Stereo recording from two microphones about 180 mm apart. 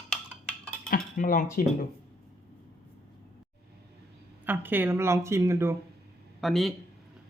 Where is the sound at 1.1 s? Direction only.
50° left (ahead or behind).